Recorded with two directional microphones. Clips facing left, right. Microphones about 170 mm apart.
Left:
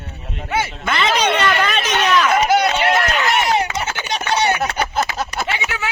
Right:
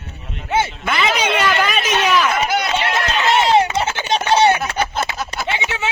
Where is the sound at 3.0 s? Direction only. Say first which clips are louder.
Right 1 dB; 20° right (ahead or behind).